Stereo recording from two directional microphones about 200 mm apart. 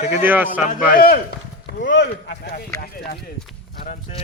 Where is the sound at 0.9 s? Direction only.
45° left (ahead or behind).